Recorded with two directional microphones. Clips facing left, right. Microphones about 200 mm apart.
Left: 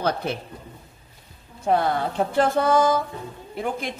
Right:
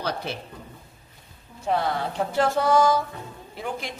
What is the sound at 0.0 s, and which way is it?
Speech, 55° left (ahead or behind).